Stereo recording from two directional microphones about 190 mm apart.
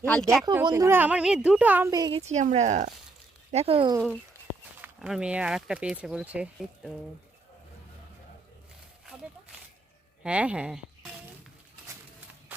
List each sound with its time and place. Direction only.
0.0 s speech: 5° left (ahead or behind)
0.6 s a woman's voice: 20° right (ahead or behind)
2.2 s speech: 35° right (ahead or behind)
4.8 s speech: 5° right (ahead or behind)
10.2 s speech: 5° right (ahead or behind)